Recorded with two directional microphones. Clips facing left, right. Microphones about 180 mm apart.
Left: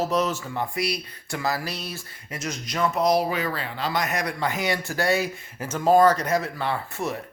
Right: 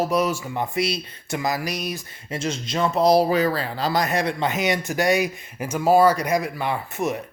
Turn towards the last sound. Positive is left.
turn(degrees=-20)  # may be behind; listen again after turning